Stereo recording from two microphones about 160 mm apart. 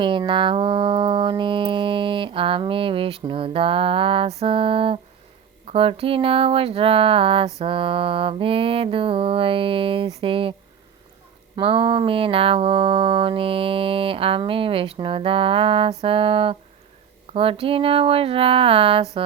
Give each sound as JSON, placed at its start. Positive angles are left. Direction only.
{"t": 0.0, "sound": "music", "side_deg": -30}
{"t": 11.5, "sound": "music", "side_deg": -35}